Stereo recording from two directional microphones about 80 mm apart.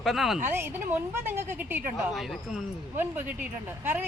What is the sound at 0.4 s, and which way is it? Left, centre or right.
Speech, right.